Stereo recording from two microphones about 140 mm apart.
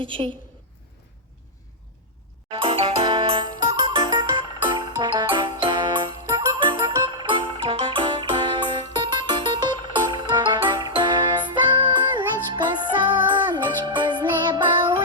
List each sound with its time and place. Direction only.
0.0 s a woman's voice: 40° right (ahead or behind)
2.5 s music: 40° right (ahead or behind)